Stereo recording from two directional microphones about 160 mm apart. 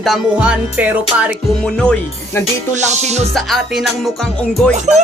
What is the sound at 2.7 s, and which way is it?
Music, 45° right (ahead or behind).